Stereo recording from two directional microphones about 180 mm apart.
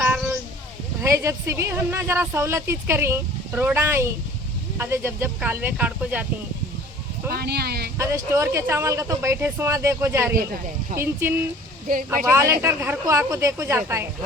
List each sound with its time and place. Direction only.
1.0 s speech: 15° right (ahead or behind)
7.3 s speech: 60° right (ahead or behind)
7.9 s speech: 15° right (ahead or behind)